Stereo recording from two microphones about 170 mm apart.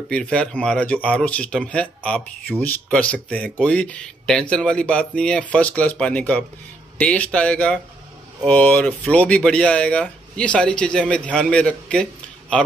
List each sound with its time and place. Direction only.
0.1 s speech: 5° left (ahead or behind)